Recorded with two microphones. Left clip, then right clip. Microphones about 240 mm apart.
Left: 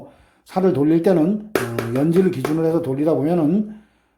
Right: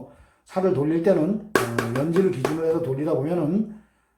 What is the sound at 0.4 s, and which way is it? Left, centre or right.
Speech, left.